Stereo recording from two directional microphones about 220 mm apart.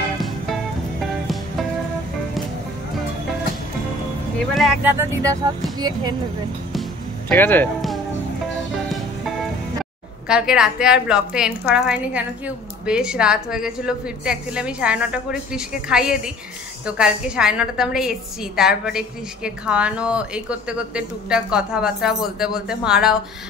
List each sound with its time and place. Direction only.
1.0 s music: centre (ahead or behind)
4.4 s speech: centre (ahead or behind)
4.9 s speech: 15° right (ahead or behind)
6.7 s music: 5° left (ahead or behind)
10.2 s a woman's voice: 5° right (ahead or behind)